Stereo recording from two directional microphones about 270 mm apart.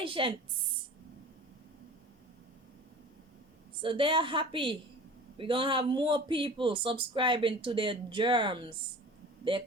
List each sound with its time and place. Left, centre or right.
0.0 s a woman's voice: centre
3.8 s speech: centre